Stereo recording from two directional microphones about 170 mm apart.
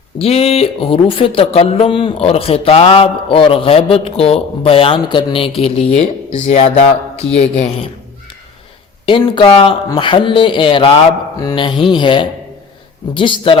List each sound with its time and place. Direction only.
0.2 s speech: 35° left (ahead or behind)
9.0 s speech: 30° left (ahead or behind)